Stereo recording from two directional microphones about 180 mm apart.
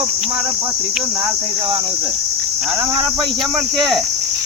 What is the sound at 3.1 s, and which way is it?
Speech, centre (ahead or behind).